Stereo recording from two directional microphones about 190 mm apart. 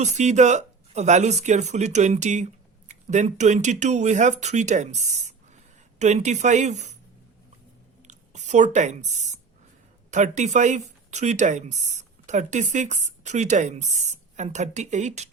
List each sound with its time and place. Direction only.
0.0 s speech: 35° right (ahead or behind)
8.0 s a sound: 40° right (ahead or behind)
10.1 s speech: 40° right (ahead or behind)